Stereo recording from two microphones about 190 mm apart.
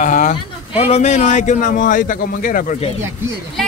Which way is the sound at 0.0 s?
45° left (ahead or behind).